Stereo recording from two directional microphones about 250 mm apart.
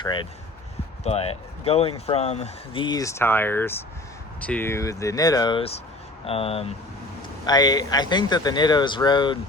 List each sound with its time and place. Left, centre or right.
0.0 s speech: centre